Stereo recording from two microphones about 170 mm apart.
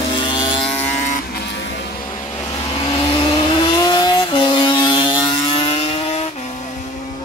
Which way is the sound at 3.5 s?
30° left (ahead or behind).